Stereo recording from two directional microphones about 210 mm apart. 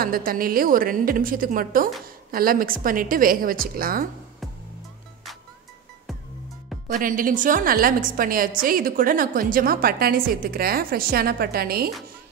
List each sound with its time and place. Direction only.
0.0 s a woman's voice: 45° right (ahead or behind)
6.9 s a woman's voice: 40° right (ahead or behind)